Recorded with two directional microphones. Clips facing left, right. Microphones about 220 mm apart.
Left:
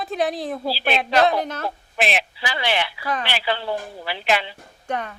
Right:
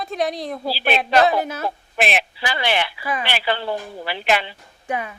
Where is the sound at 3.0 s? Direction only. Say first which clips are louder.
Even; 5° right (ahead or behind).